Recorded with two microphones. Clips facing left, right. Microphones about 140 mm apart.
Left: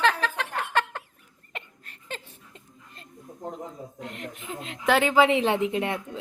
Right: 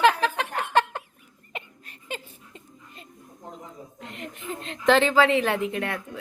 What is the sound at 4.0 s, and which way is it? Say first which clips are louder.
Speech: right 1 dB; centre (ahead or behind).